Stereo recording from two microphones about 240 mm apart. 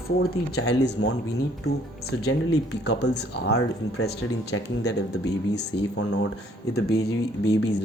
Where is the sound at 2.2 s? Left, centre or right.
Left.